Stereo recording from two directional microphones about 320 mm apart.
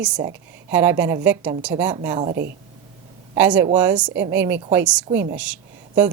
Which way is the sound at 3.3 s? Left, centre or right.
Centre.